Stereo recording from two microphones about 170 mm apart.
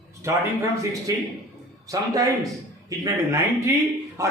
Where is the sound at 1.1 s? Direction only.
20° right (ahead or behind).